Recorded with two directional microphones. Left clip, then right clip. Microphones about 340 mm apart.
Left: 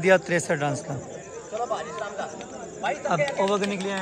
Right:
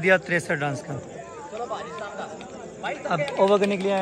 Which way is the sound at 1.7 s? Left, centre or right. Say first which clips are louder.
Left 2 dB; left.